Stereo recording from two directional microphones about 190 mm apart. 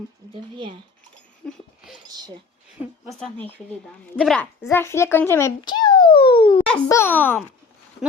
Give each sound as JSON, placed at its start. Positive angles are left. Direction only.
{"t": 0.5, "sound": "speech", "side_deg": -25}
{"t": 1.5, "sound": "a sound", "side_deg": 0}
{"t": 2.0, "sound": "speech", "side_deg": -20}
{"t": 3.1, "sound": "a child's voice", "side_deg": 5}
{"t": 6.8, "sound": "speech", "side_deg": 15}